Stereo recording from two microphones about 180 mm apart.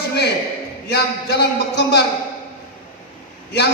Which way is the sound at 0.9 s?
70° left (ahead or behind).